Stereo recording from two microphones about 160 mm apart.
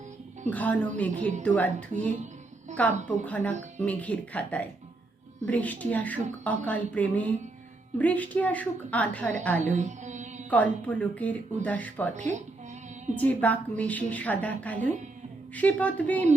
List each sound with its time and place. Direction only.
0.5 s speech: 10° left (ahead or behind)
2.7 s speech: 10° left (ahead or behind)
9.6 s mantra: 50° right (ahead or behind)
10.5 s speech: 10° left (ahead or behind)